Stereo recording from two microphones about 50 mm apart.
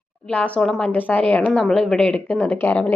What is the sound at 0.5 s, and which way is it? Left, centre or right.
Speech, centre.